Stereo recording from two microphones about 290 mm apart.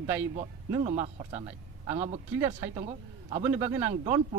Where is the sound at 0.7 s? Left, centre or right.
Right.